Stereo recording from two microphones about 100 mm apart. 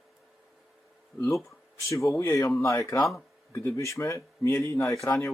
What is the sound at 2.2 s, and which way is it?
A man's voice, 30° left (ahead or behind).